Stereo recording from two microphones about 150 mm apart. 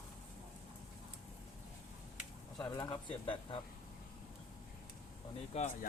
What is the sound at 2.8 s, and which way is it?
Speech, 25° left (ahead or behind).